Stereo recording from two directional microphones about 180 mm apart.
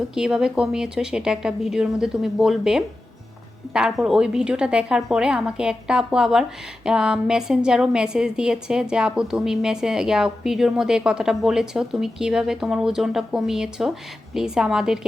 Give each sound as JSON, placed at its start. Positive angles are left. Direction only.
{"t": 0.1, "sound": "a woman's voice", "side_deg": -5}